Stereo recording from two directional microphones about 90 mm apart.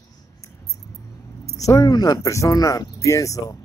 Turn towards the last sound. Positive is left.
turn(degrees=35)  # may be behind; listen again after turning